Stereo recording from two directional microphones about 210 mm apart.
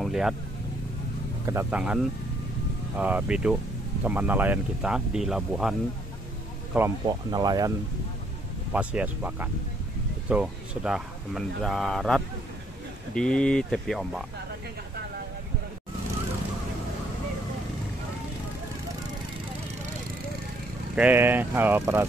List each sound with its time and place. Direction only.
0.0 s speech: centre (ahead or behind)
1.4 s speech: 10° right (ahead or behind)
7.1 s speech: 20° right (ahead or behind)
8.7 s speech: 5° right (ahead or behind)
20.9 s speech: 10° right (ahead or behind)